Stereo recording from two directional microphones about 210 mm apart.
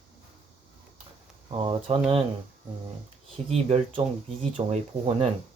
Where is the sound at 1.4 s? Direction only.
25° right (ahead or behind).